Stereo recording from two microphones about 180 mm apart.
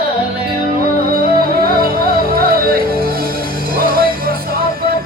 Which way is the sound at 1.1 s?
55° right (ahead or behind).